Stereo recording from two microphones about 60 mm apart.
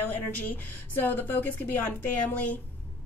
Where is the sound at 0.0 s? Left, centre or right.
Left.